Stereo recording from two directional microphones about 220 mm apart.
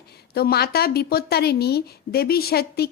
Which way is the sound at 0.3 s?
45° left (ahead or behind).